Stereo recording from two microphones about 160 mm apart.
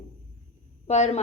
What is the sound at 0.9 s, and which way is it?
Speech, 45° left (ahead or behind).